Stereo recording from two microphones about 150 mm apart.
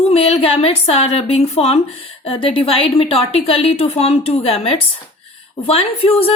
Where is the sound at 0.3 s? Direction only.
40° left (ahead or behind).